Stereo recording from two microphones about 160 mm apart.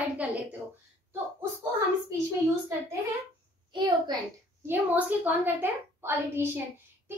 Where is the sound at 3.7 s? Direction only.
30° right (ahead or behind).